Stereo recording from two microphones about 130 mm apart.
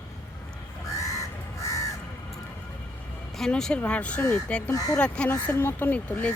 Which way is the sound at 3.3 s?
5° left (ahead or behind).